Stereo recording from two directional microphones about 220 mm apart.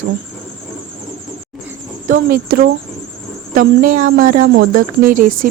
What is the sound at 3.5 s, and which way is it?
A woman's voice, 40° right (ahead or behind).